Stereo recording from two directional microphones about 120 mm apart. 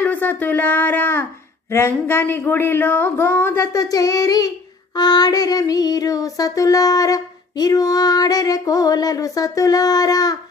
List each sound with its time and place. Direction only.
0.0 s a sound: 15° left (ahead or behind)
1.7 s speech: 20° left (ahead or behind)
3.7 s speech: 30° left (ahead or behind)
4.9 s child singing: 35° left (ahead or behind)